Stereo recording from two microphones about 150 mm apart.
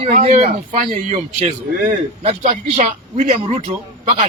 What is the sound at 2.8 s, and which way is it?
Speech, 50° right (ahead or behind).